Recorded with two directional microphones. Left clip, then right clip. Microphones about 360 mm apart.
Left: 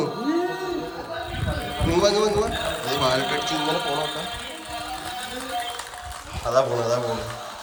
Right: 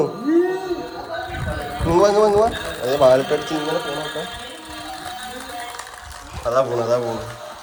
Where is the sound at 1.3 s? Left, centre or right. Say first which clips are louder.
Right 2 dB; centre.